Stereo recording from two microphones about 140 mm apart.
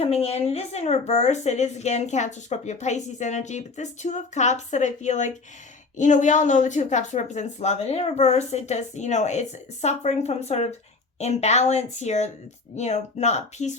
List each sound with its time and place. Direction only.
0.0 s a woman's voice: 45° left (ahead or behind)